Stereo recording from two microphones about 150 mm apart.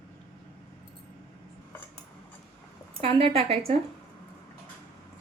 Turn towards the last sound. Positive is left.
turn(degrees=-40)  # may be behind; listen again after turning